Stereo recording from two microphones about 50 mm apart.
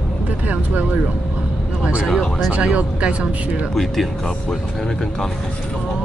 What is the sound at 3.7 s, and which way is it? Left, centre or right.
Speech, centre.